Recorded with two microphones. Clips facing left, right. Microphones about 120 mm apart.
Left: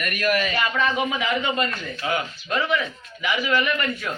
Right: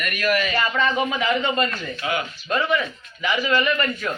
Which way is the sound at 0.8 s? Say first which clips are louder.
Right 1 dB; 10° left (ahead or behind).